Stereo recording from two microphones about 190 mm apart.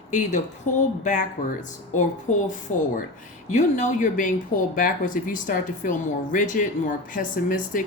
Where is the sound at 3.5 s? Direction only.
40° left (ahead or behind).